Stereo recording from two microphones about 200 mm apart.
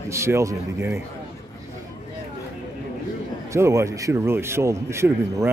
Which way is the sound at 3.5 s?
15° right (ahead or behind).